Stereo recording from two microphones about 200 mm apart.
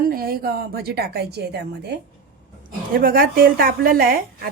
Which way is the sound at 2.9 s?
45° right (ahead or behind).